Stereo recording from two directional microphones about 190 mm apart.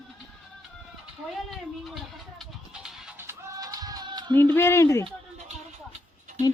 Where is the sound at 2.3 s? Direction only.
Centre (ahead or behind); by 4.3 s 25° right (ahead or behind).